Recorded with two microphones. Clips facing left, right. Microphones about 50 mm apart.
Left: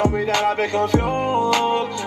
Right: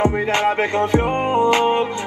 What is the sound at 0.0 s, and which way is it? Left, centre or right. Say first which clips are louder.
Music: right 1 dB; right.